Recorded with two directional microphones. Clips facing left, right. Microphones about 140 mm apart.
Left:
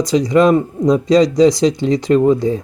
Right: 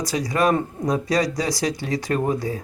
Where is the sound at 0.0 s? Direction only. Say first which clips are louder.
Left 9 dB; 20° left (ahead or behind).